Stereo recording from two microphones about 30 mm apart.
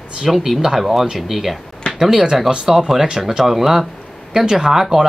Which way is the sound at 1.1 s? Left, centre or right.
Centre.